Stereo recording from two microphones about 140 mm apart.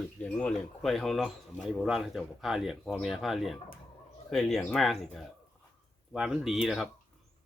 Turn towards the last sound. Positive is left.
turn(degrees=0)  # may be behind; listen again after turning